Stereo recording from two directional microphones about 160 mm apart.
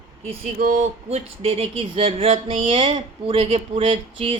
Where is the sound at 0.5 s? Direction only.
60° right (ahead or behind).